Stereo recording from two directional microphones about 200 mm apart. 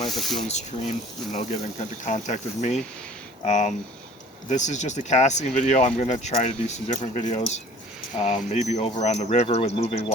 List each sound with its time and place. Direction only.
0.1 s speech: centre (ahead or behind)
0.4 s speech: 35° left (ahead or behind)